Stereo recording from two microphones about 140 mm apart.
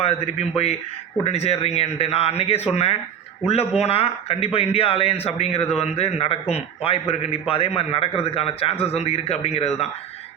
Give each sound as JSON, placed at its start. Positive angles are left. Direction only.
{"t": 0.0, "sound": "a man's voice", "side_deg": 45}